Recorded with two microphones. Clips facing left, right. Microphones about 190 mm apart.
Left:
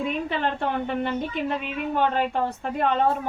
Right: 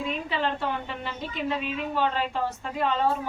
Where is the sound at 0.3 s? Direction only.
55° left (ahead or behind).